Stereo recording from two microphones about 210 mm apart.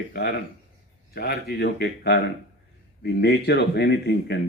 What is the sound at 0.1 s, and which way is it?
Speech, 50° left (ahead or behind).